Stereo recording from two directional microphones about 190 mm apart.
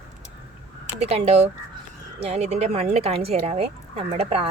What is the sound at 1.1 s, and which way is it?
Speech, 35° right (ahead or behind).